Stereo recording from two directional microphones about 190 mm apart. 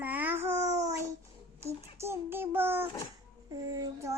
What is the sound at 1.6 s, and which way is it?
Child singing, 15° right (ahead or behind).